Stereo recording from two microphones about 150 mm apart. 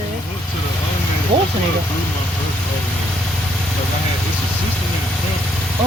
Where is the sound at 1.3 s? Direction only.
35° right (ahead or behind).